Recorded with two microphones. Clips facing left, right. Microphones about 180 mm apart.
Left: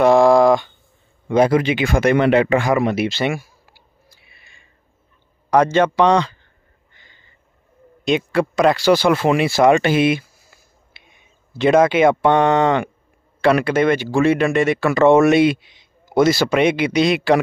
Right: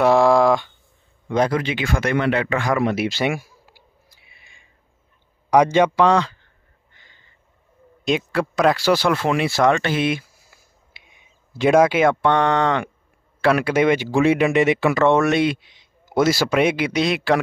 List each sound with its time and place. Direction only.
0.0 s a sound: centre (ahead or behind)
1.3 s speech: 10° left (ahead or behind)
2.7 s clicking: centre (ahead or behind); by 4.6 s 15° right (ahead or behind)
5.5 s speech: 15° right (ahead or behind)
5.9 s speech: centre (ahead or behind)
8.3 s speech: centre (ahead or behind)
10.9 s speech: 15° right (ahead or behind)
15.0 s speech: 5° left (ahead or behind)